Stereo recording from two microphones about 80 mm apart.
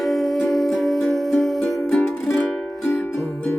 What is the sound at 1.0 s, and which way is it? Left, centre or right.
Music, centre.